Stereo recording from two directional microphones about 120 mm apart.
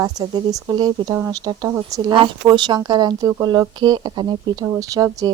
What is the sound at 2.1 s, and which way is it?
Speech, 40° right (ahead or behind).